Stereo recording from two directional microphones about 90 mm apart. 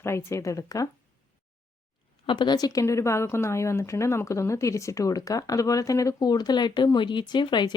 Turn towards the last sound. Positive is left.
turn(degrees=55)  # may be behind; listen again after turning